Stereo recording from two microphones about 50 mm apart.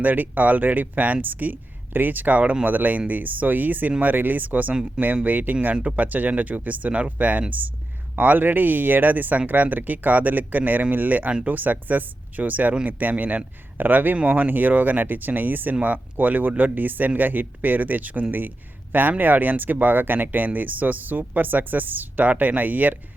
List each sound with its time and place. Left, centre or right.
0.0 s speech: right